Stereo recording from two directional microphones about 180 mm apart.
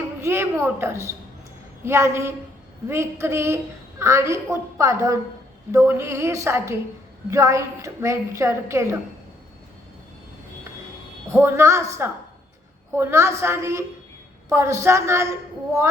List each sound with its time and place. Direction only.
0.2 s a woman's voice: 15° right (ahead or behind)
11.3 s a woman's voice: 15° right (ahead or behind)